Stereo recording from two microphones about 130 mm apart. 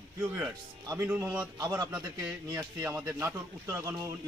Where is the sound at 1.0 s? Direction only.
15° right (ahead or behind).